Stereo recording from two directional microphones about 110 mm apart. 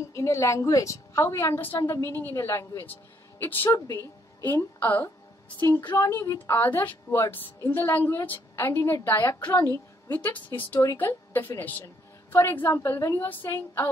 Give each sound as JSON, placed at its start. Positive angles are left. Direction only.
{"t": 0.1, "sound": "a woman's voice", "side_deg": 25}
{"t": 3.7, "sound": "a woman's voice", "side_deg": 35}
{"t": 4.5, "sound": "speech", "side_deg": 20}
{"t": 5.7, "sound": "a woman's voice", "side_deg": 40}
{"t": 5.9, "sound": "a woman's voice", "side_deg": 20}